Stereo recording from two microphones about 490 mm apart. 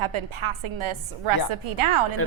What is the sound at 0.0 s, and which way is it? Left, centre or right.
A woman's voice, right.